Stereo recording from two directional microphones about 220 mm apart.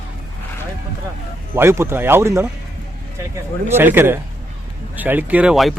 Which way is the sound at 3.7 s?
10° right (ahead or behind).